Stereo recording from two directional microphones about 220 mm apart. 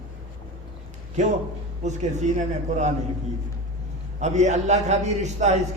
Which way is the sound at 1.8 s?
30° right (ahead or behind).